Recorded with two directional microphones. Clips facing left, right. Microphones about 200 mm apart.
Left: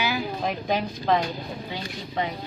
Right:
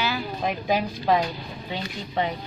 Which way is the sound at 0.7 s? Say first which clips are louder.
Right 2 dB; 5° right (ahead or behind).